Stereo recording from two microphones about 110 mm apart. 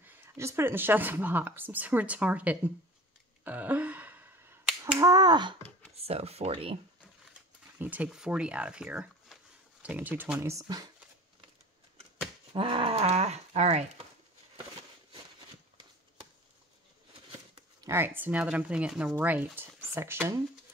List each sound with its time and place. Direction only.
0.0 s a woman's voice: 20° right (ahead or behind)
3.4 s a sound: 15° right (ahead or behind)
4.9 s finger snapping: 35° right (ahead or behind)
5.9 s speech: 70° right (ahead or behind)
7.8 s a woman's voice: 15° right (ahead or behind)
12.5 s speech: 55° right (ahead or behind); by 13.8 s 90° right
17.7 s a woman's voice: 25° right (ahead or behind)